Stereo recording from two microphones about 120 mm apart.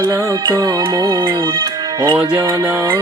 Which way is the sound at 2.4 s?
20° right (ahead or behind).